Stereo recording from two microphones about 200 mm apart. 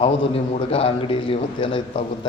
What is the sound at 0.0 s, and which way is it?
A man's voice, 30° left (ahead or behind).